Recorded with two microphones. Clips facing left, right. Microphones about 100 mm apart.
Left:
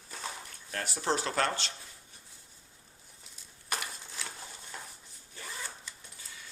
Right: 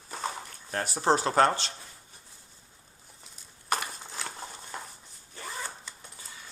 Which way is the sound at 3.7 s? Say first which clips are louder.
Right 7 dB; 40° right (ahead or behind).